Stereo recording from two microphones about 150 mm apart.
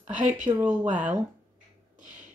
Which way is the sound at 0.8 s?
55° right (ahead or behind).